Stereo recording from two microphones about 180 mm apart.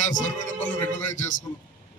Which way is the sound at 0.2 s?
45° left (ahead or behind).